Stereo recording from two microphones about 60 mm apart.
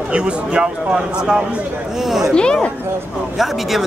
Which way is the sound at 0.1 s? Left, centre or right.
Centre.